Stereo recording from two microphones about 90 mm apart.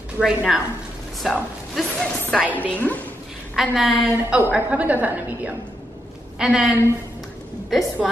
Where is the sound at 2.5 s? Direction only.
15° left (ahead or behind).